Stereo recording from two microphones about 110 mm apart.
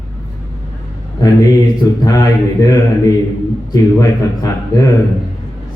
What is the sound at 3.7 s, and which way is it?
Speech, 30° left (ahead or behind).